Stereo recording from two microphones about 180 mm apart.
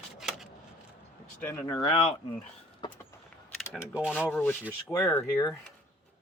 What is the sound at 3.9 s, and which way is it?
Speech, 5° right (ahead or behind).